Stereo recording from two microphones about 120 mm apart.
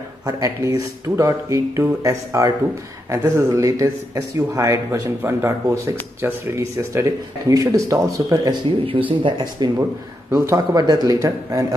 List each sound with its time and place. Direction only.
0.2 s speech: 30° right (ahead or behind)
8.8 s speech: 45° right (ahead or behind); by 11.6 s 30° right (ahead or behind)